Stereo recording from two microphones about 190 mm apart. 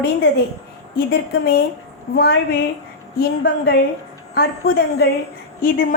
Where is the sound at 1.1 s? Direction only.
55° left (ahead or behind).